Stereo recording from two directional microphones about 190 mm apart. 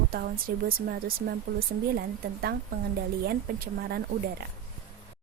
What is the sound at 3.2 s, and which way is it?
Speech, 55° right (ahead or behind).